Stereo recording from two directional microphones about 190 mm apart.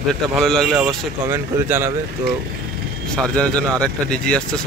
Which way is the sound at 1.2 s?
10° right (ahead or behind).